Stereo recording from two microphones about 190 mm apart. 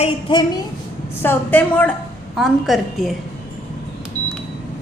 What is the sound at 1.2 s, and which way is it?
A woman's voice, 10° left (ahead or behind).